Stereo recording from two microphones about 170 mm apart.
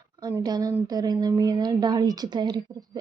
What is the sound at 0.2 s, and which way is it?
A woman's voice, 20° right (ahead or behind).